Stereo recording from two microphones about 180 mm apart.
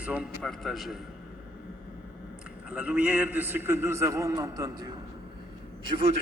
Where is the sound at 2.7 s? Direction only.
5° right (ahead or behind).